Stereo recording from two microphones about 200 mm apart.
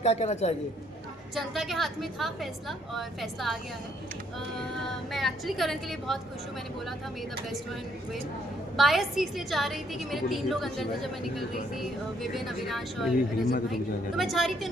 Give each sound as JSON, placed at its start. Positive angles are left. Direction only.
{"t": 0.0, "sound": "a man's voice", "side_deg": 30}
{"t": 1.4, "sound": "a woman's voice", "side_deg": 0}
{"t": 5.1, "sound": "a woman's voice", "side_deg": 0}
{"t": 8.7, "sound": "a woman's voice", "side_deg": 0}